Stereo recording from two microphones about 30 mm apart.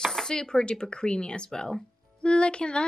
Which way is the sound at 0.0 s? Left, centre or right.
Centre.